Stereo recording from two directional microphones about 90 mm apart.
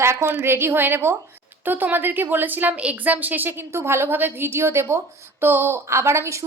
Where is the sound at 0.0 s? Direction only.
30° right (ahead or behind).